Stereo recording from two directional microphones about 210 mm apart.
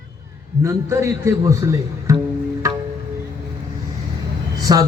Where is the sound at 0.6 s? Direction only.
10° right (ahead or behind).